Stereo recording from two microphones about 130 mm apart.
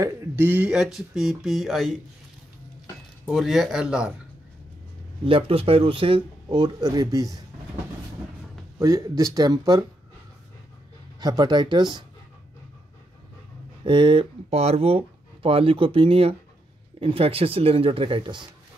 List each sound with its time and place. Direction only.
0.0 s speech: 15° right (ahead or behind); by 2.0 s centre (ahead or behind)
3.3 s speech: centre (ahead or behind)
5.2 s speech: 45° right (ahead or behind); by 7.3 s 30° right (ahead or behind)
8.7 s speech: 25° right (ahead or behind)
11.1 s speech: 30° right (ahead or behind)
13.8 s speech: 40° right (ahead or behind)
14.5 s speech: 55° right (ahead or behind)